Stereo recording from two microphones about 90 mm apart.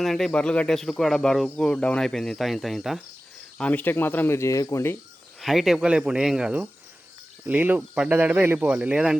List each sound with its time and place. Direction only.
0.0 s cricket: centre (ahead or behind)
3.6 s speech: 20° left (ahead or behind)
5.4 s speech: centre (ahead or behind)
7.4 s speech: 20° right (ahead or behind)